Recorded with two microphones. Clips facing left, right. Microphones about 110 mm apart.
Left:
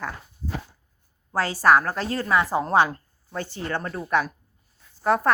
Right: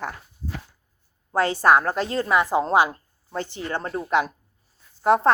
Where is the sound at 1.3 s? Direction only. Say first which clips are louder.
Right 1 dB; 20° right (ahead or behind).